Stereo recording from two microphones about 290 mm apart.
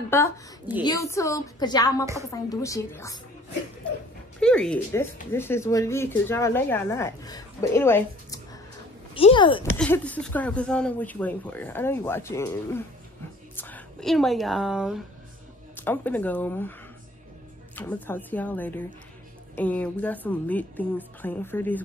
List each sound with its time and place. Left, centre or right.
0.1 s speech: centre
4.4 s speech: centre
9.8 s speech: centre
17.7 s speech: centre